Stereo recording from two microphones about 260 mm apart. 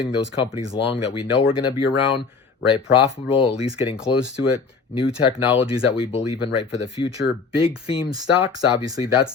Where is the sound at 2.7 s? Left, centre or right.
Centre.